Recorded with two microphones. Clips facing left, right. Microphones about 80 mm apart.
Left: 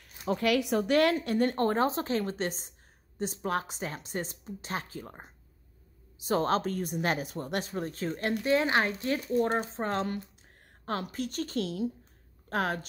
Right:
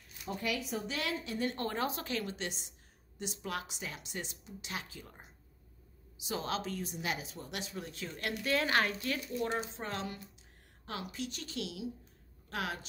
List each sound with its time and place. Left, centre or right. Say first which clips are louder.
0.3 s a woman's voice: left 10 dB; left